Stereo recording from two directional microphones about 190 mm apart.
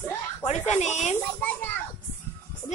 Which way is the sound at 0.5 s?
35° left (ahead or behind).